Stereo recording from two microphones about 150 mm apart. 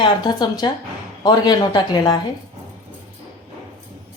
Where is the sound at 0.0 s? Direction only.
30° left (ahead or behind).